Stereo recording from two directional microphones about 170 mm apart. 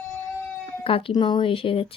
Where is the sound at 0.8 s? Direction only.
30° left (ahead or behind).